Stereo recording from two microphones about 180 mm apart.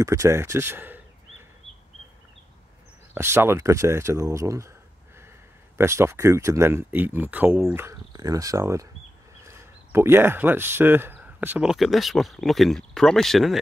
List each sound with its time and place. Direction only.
0.0 s speech: 15° right (ahead or behind)
3.2 s speech: 15° right (ahead or behind)
5.8 s speech: 15° right (ahead or behind); by 13.6 s centre (ahead or behind)